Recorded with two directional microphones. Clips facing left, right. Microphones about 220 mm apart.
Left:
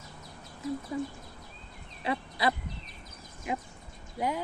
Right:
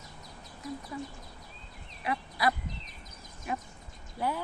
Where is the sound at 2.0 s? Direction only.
25° left (ahead or behind).